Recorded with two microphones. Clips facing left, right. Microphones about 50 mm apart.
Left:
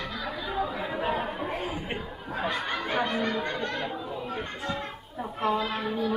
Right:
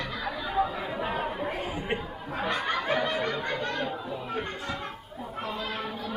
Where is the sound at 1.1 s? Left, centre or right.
Centre.